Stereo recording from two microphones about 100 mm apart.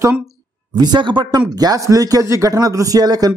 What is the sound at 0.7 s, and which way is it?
A man's voice, 50° right (ahead or behind).